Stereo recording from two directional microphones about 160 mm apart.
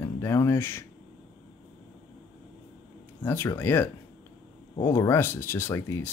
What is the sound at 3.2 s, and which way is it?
Speech, 15° left (ahead or behind).